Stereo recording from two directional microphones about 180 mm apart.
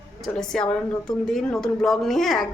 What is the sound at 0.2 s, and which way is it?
Speech, 5° left (ahead or behind).